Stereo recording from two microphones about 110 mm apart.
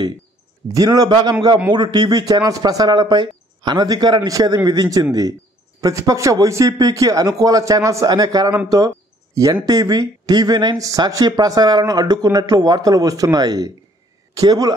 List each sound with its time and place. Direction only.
0.7 s speech: 35° right (ahead or behind)
8.6 s a sound: 35° right (ahead or behind)
9.7 s speech: 35° right (ahead or behind)